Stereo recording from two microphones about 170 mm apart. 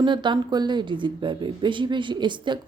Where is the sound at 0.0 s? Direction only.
25° right (ahead or behind).